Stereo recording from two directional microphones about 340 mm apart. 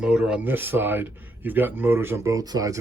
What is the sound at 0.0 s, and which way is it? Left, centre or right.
Speech, centre.